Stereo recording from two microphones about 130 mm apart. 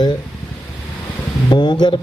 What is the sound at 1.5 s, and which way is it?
Speech, 35° left (ahead or behind).